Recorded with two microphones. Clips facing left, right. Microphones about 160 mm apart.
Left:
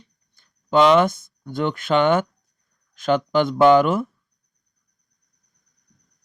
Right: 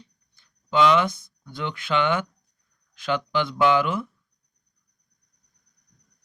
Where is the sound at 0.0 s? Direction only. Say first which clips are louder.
Right 2 dB; 50° left (ahead or behind).